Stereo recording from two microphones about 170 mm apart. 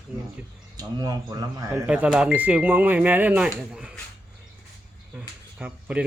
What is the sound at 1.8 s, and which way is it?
Speech, 5° right (ahead or behind).